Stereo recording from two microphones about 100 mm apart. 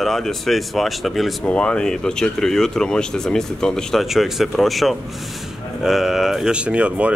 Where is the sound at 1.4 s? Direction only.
10° left (ahead or behind).